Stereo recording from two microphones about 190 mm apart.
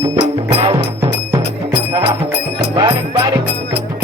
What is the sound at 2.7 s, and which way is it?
Music, 25° right (ahead or behind).